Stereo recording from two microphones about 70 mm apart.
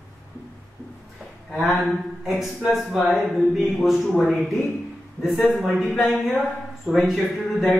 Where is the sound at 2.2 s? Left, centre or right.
Centre.